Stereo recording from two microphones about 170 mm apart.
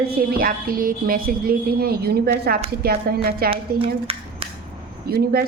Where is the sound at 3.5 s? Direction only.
35° right (ahead or behind).